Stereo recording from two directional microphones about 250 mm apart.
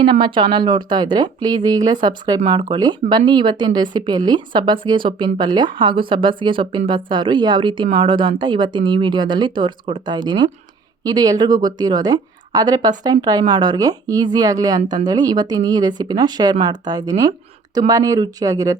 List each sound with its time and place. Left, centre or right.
0.0 s speech: centre